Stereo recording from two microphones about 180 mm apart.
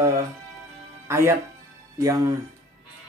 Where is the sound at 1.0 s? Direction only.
15° right (ahead or behind).